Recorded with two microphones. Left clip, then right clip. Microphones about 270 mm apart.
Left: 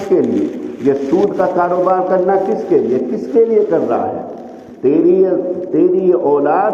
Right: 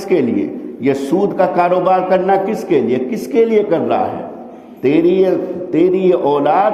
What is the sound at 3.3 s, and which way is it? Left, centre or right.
A man's voice, right.